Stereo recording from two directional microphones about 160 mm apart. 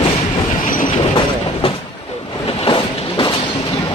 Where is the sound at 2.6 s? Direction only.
30° left (ahead or behind).